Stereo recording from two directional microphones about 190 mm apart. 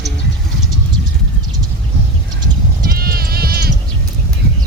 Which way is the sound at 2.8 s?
55° right (ahead or behind).